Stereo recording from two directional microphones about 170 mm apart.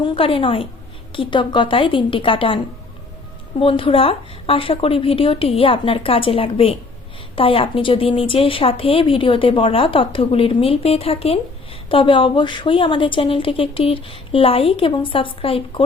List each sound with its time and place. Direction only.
0.0 s a woman's voice: 30° left (ahead or behind)
3.6 s a woman's voice: 30° left (ahead or behind)